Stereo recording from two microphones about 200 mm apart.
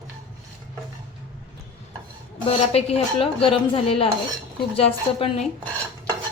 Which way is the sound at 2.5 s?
30° left (ahead or behind).